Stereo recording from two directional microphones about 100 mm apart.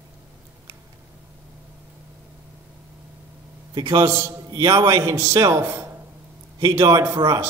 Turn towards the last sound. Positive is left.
turn(degrees=-35)  # may be behind; listen again after turning